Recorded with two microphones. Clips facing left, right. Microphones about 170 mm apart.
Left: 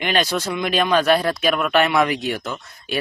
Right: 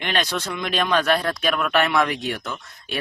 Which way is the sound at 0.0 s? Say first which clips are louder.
Left 4 dB; 5° left (ahead or behind).